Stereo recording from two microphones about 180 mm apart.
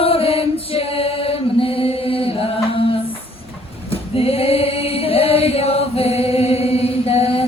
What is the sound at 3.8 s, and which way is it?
Singing, 30° left (ahead or behind).